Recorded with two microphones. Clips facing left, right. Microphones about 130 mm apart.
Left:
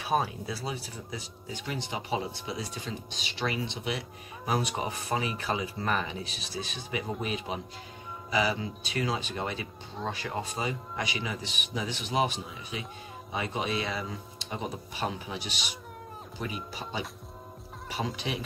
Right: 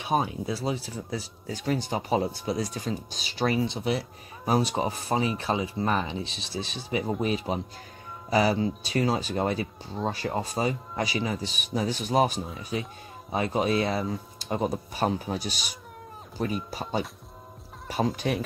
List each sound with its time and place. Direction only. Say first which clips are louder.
0.0 s speech: right 2 dB; 20° right (ahead or behind); by 16.5 s 45° right (ahead or behind)
17.8 s speech: right 7 dB; 45° right (ahead or behind)